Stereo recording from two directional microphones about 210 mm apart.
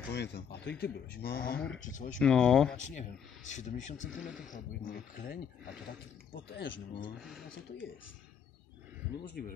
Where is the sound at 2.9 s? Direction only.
35° left (ahead or behind).